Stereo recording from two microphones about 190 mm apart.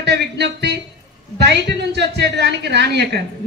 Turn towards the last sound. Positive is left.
turn(degrees=-65)  # may be behind; listen again after turning